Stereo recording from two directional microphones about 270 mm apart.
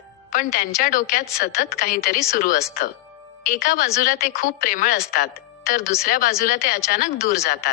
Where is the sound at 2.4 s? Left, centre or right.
Left.